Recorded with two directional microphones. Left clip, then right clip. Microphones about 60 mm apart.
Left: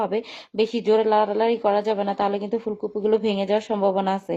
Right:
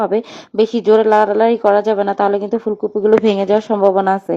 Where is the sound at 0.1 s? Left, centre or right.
Right.